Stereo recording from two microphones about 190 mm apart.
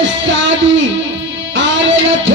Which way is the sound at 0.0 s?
75° right (ahead or behind).